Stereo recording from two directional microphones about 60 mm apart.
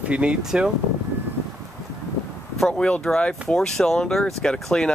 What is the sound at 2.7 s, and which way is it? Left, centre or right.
Speech, centre.